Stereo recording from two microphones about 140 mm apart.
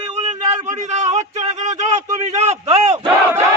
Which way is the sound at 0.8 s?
55° right (ahead or behind).